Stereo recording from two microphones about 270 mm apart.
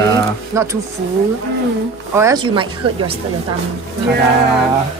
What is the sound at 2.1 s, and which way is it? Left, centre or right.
Speech, centre.